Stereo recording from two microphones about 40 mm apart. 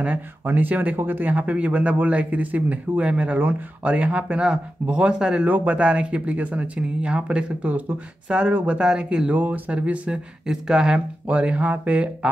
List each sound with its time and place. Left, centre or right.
0.5 s speech: right
5.4 s speech: right
7.6 s speech: right
8.3 s speech: right
9.3 s speech: right
10.1 s speech: centre
11.2 s speech: right